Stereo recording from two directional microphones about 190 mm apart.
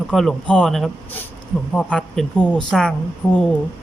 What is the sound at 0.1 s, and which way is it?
A woman's voice, 5° left (ahead or behind).